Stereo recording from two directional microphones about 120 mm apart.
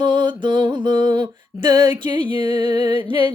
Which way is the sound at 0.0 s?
40° right (ahead or behind).